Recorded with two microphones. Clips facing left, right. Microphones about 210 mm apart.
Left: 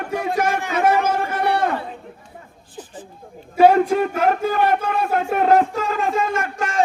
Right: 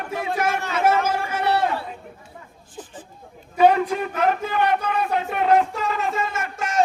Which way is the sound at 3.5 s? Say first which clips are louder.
Left 4 dB; 45° left (ahead or behind).